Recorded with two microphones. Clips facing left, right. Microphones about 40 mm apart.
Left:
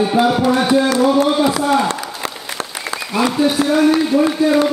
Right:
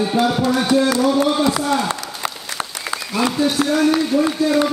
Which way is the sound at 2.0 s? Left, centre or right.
Centre.